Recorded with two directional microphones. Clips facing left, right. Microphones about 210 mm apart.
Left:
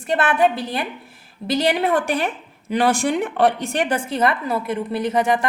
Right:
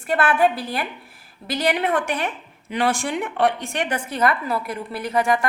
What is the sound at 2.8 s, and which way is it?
A woman's voice, 40° left (ahead or behind).